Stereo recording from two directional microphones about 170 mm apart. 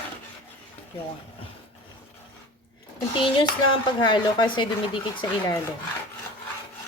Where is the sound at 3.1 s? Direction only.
30° left (ahead or behind).